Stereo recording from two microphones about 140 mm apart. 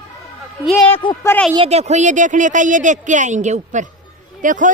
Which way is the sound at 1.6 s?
50° right (ahead or behind).